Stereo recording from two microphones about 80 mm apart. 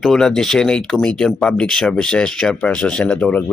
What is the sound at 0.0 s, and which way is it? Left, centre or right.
Speech, centre.